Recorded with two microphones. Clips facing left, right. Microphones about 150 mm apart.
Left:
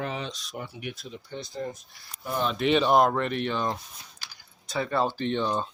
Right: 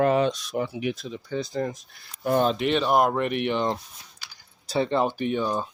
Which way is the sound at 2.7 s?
5° right (ahead or behind).